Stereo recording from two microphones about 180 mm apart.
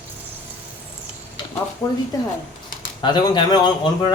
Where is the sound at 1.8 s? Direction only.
20° left (ahead or behind).